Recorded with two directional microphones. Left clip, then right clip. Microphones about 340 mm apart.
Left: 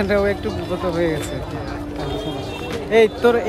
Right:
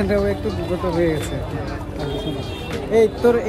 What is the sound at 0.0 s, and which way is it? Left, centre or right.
Speech, centre.